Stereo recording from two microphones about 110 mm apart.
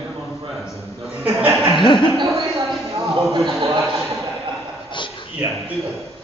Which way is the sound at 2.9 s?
40° right (ahead or behind).